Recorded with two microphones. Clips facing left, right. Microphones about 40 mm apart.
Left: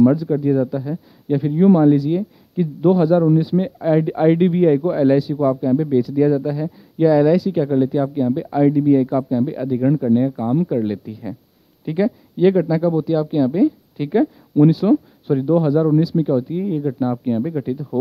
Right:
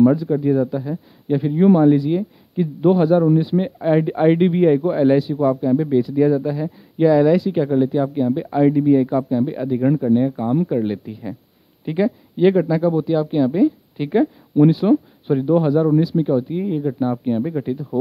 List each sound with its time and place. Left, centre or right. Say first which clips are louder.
0.0 s speech: even; centre
3.1 s speech: even; centre
3.4 s speech: even; centre
15.7 s speech: even; centre